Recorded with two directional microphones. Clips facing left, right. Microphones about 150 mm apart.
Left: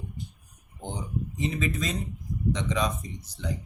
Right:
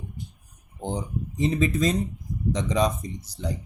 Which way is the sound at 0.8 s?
35° right (ahead or behind).